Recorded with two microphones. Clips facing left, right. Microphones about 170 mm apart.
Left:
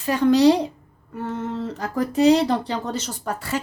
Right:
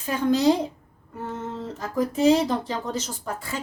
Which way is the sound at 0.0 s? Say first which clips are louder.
Left 5 dB; 75° left (ahead or behind).